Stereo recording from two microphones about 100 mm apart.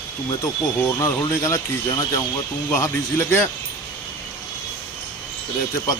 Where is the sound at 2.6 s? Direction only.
25° left (ahead or behind).